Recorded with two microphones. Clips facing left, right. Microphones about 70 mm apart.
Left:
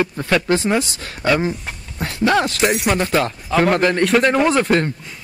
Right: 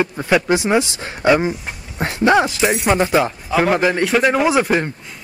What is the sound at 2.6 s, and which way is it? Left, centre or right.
Speech, centre.